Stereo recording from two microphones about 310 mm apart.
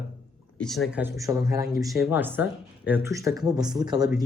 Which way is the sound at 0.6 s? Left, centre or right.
Centre.